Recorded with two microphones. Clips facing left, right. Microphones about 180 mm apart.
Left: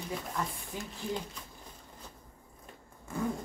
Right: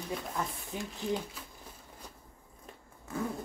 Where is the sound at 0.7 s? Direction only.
20° right (ahead or behind).